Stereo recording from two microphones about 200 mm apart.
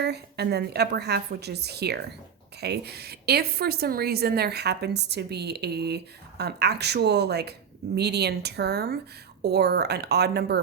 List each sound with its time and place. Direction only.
0.0 s a woman's voice: 55° right (ahead or behind)